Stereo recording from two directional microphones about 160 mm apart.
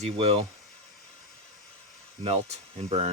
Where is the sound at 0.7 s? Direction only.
5° left (ahead or behind).